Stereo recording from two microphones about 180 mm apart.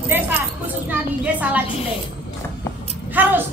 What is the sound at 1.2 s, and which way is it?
Speech, 10° right (ahead or behind).